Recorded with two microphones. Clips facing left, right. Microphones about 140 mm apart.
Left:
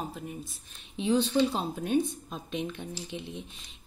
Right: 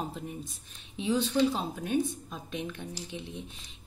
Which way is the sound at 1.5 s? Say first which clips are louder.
Even; 10° left (ahead or behind).